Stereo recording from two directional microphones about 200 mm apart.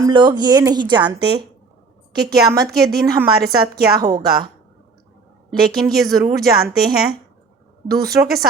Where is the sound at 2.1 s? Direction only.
50° right (ahead or behind).